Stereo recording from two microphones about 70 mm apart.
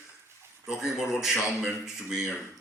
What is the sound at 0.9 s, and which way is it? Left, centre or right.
A man's voice, centre.